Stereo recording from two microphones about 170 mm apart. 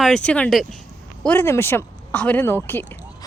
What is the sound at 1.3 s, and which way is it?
A woman's voice, 15° left (ahead or behind).